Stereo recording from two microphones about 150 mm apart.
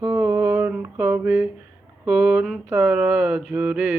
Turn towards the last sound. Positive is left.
turn(degrees=-10)  # may be behind; listen again after turning